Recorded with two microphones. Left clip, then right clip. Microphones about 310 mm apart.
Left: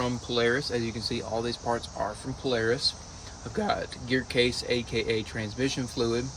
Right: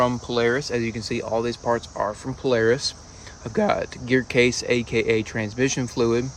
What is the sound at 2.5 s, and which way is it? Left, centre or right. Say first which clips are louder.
Speech: right 7 dB; centre.